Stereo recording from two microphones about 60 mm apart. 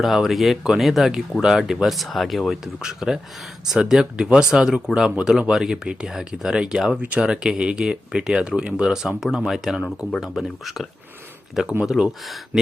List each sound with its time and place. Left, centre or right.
0.0 s speech: centre; by 7.3 s right
7.4 s speech: centre
11.9 s speech: centre